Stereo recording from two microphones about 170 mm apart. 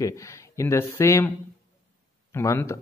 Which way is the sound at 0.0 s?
20° left (ahead or behind).